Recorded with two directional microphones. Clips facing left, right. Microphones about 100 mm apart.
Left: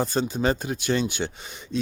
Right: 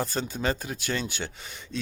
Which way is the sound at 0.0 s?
20° left (ahead or behind).